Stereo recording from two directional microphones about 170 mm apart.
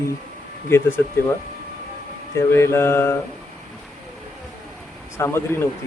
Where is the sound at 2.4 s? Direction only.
15° left (ahead or behind).